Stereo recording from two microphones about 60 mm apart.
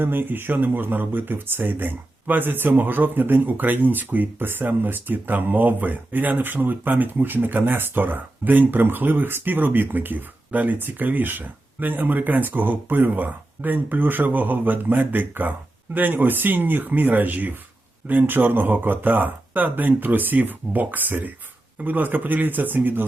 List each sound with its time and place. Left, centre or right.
0.0 s speech: right